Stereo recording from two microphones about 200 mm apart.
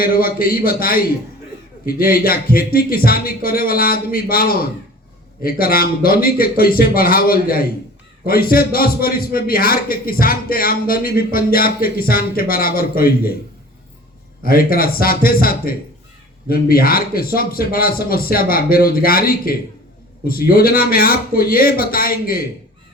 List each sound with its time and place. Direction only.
0.0 s a man's voice: 45° left (ahead or behind)
14.4 s a man's voice: 45° left (ahead or behind)